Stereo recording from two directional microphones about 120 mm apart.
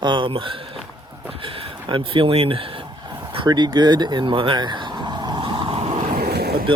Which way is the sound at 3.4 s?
35° right (ahead or behind).